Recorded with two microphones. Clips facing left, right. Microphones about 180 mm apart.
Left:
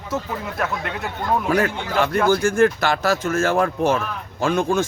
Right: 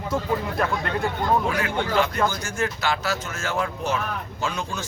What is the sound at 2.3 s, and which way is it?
Speech, 55° left (ahead or behind).